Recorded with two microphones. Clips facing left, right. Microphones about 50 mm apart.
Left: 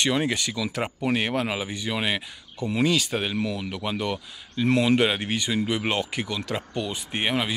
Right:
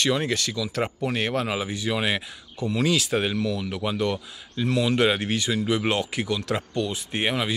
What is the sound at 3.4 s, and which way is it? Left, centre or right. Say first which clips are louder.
Speech: right 1 dB; left.